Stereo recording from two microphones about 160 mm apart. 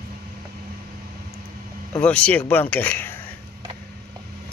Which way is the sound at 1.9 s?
5° left (ahead or behind).